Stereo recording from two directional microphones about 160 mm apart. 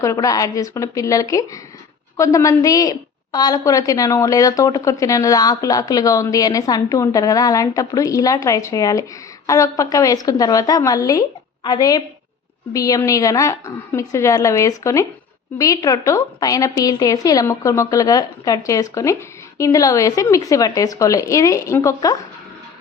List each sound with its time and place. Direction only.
0.0 s a woman's voice: 20° left (ahead or behind)